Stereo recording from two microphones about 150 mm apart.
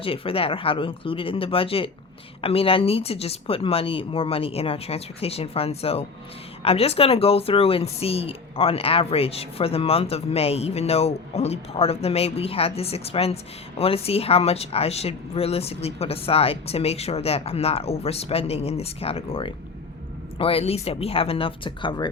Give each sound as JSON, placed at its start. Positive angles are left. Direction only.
{"t": 0.0, "sound": "speech", "side_deg": 40}